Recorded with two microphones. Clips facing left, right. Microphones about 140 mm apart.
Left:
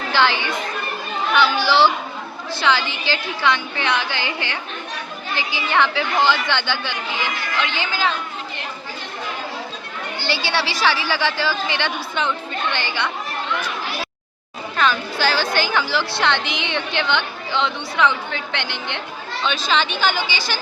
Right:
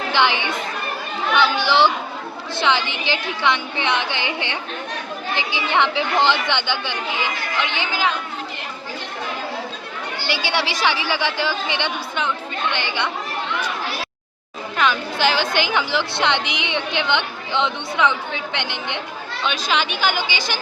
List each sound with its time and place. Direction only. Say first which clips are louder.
0.1 s a woman's voice: left 1 dB; 20° right (ahead or behind)
10.2 s a woman's voice: even; 15° right (ahead or behind)
14.8 s a woman's voice: even; 15° right (ahead or behind)